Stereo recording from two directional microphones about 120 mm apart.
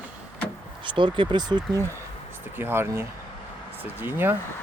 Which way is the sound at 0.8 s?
45° right (ahead or behind).